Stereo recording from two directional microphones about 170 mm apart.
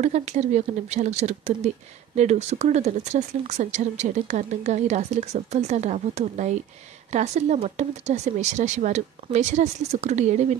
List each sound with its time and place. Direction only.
0.0 s speech: 45° right (ahead or behind)